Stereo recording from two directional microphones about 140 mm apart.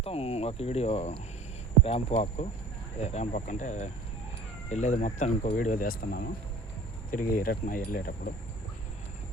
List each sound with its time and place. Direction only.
0.0 s speech: 45° left (ahead or behind); by 6.2 s 90° left
7.1 s speech: 80° left